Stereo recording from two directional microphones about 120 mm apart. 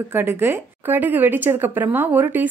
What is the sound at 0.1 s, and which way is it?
Speech, 20° right (ahead or behind).